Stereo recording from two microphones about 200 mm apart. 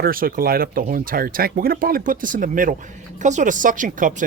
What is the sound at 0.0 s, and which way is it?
Speech, 45° right (ahead or behind).